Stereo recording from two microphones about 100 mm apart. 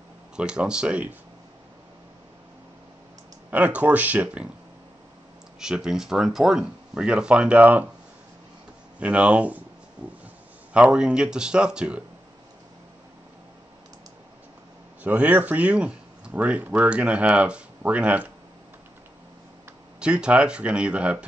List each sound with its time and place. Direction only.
0.4 s speech: 10° right (ahead or behind)
3.4 s speech: 15° right (ahead or behind)
5.6 s speech: 5° right (ahead or behind)
9.0 s speech: 15° right (ahead or behind)
10.7 s speech: 10° right (ahead or behind)
15.0 s speech: 15° right (ahead or behind)
20.0 s speech: 10° right (ahead or behind)